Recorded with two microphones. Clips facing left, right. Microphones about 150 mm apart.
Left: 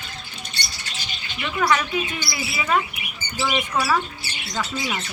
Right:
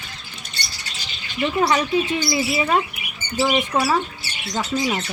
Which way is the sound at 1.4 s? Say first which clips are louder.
Right 3 dB; 30° right (ahead or behind).